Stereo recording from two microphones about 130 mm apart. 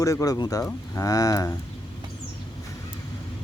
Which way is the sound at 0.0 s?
25° left (ahead or behind).